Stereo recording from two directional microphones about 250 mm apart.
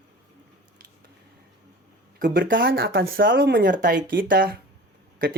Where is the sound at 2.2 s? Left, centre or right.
Right.